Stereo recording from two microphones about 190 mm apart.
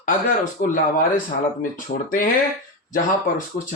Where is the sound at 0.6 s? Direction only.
55° left (ahead or behind).